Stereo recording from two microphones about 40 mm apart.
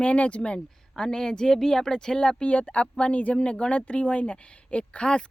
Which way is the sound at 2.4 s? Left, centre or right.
Left.